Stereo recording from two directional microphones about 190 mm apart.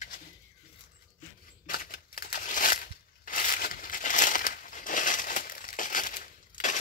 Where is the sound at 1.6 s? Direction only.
50° left (ahead or behind).